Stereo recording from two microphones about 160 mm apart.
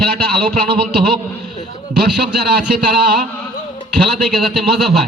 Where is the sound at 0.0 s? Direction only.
85° right.